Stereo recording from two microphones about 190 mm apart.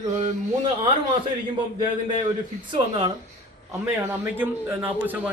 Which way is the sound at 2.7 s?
25° right (ahead or behind).